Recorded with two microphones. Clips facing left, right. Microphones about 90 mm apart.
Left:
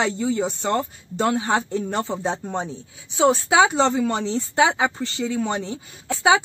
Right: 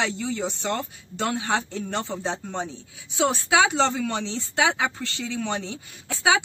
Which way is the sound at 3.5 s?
35° left (ahead or behind).